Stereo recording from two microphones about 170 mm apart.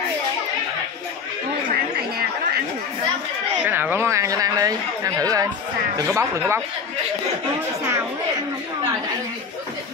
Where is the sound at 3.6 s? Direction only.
10° right (ahead or behind).